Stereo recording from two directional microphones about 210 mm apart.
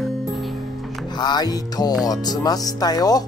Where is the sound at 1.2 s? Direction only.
20° left (ahead or behind).